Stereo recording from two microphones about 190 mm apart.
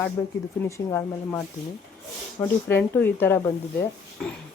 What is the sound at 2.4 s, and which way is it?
Speech, 10° left (ahead or behind).